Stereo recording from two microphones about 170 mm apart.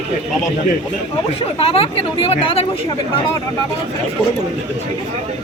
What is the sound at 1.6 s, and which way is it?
Speech, 35° left (ahead or behind).